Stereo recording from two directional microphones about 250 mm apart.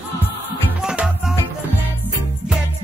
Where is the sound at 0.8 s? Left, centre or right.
Centre.